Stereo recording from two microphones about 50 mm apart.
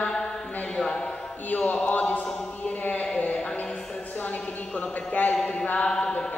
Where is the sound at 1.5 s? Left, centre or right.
Left.